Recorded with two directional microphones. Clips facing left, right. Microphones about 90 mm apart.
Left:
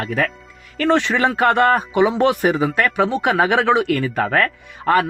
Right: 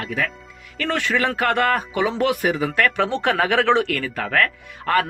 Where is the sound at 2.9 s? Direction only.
10° left (ahead or behind).